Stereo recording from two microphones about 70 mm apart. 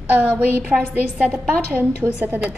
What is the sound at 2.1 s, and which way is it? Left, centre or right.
Speech, right.